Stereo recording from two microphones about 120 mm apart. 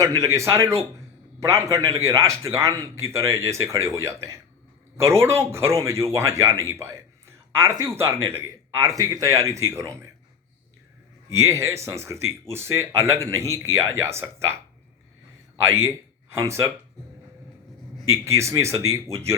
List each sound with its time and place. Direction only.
0.0 s speech: 25° right (ahead or behind)
11.3 s speech: 25° right (ahead or behind)
15.8 s speech: 25° right (ahead or behind)
18.3 s speech: 25° right (ahead or behind)